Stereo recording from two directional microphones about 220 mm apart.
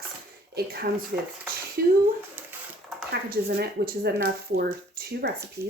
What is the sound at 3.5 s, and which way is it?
Speech, 45° right (ahead or behind).